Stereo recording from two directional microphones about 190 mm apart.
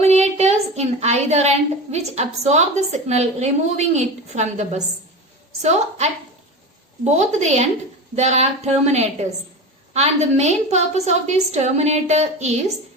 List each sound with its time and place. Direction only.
0.0 s a woman's voice: 35° right (ahead or behind)
7.0 s a woman's voice: 35° right (ahead or behind)